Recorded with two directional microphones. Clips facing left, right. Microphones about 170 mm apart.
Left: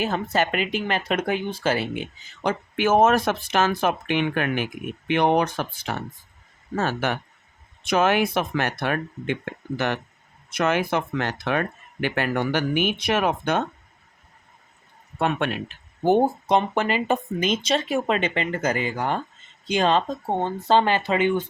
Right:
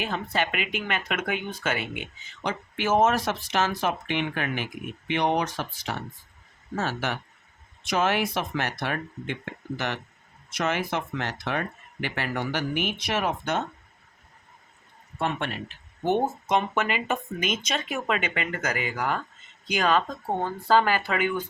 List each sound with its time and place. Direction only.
0.0 s speech: 40° left (ahead or behind)
2.4 s speech: 50° left (ahead or behind)
15.2 s speech: 65° left (ahead or behind)
16.0 s speech: 35° left (ahead or behind)